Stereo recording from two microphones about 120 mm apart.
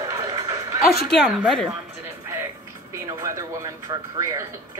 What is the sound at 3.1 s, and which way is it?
Speech, 25° right (ahead or behind).